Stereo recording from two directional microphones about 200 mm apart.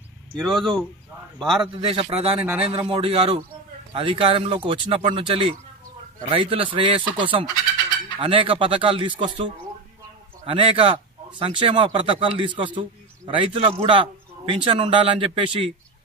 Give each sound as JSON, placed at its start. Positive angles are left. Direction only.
{"t": 0.4, "sound": "speech", "side_deg": 0}
{"t": 1.8, "sound": "a man's voice", "side_deg": -25}